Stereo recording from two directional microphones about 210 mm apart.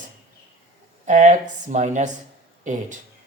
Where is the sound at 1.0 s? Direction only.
35° right (ahead or behind).